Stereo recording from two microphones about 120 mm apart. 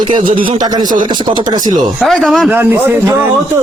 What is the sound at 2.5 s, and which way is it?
Speech, 15° right (ahead or behind).